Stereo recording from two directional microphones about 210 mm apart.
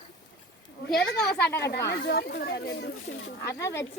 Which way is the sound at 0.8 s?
50° left (ahead or behind).